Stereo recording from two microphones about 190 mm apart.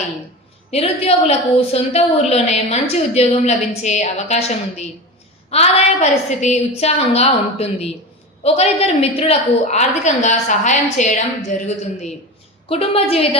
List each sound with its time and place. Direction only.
0.7 s a woman's voice: 30° left (ahead or behind)
12.6 s a woman's voice: 30° left (ahead or behind)